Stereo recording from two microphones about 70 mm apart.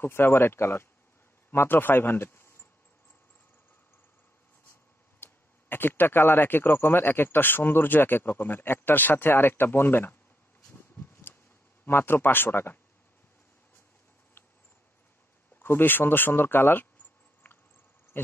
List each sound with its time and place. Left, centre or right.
0.0 s speech: left
5.2 s speech: left
10.7 s a sound: left
11.8 s speech: left
14.4 s mouse: left
15.6 s speech: left
18.1 s cricket: left